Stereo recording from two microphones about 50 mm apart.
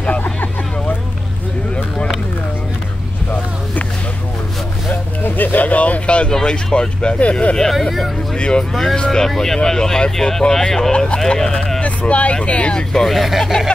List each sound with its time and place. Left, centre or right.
0.2 s vehicle: left
5.2 s vehicle: left
6.3 s speech: centre
11.8 s vehicle: left
12.4 s speech: left
12.9 s speech: centre